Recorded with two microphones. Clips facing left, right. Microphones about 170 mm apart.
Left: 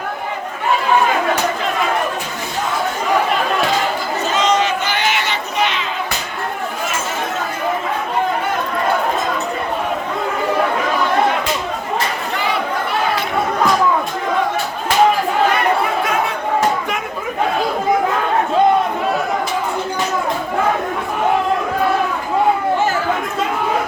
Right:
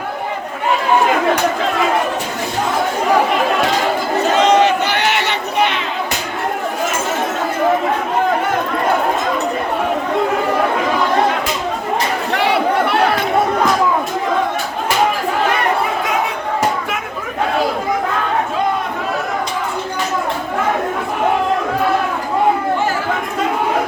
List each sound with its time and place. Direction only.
4.4 s crowd: 60° right (ahead or behind)
12.3 s battle cry: 70° right (ahead or behind)